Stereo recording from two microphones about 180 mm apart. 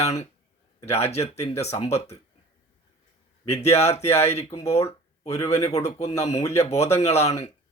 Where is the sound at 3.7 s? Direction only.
35° left (ahead or behind).